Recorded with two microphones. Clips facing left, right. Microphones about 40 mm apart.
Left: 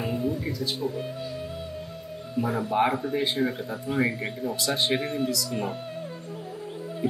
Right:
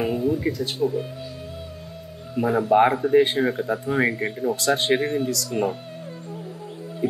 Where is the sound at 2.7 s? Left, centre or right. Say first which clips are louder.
Right 7 dB; right.